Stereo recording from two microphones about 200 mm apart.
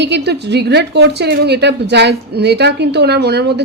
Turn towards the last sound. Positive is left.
turn(degrees=-55)  # may be behind; listen again after turning